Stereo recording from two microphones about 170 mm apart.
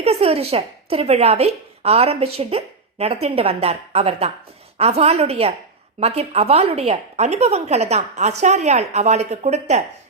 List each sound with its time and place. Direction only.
0.0 s a woman's voice: 35° right (ahead or behind)